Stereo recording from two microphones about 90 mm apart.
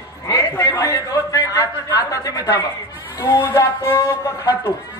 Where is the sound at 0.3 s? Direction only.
35° left (ahead or behind).